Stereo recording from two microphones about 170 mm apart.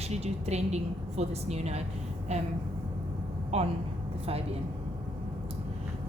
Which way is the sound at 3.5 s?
40° right (ahead or behind).